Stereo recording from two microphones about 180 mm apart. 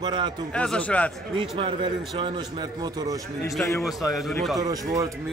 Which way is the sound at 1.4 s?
30° right (ahead or behind).